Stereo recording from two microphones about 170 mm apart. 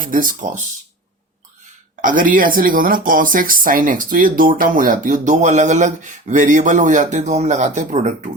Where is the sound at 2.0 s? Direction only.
50° right (ahead or behind).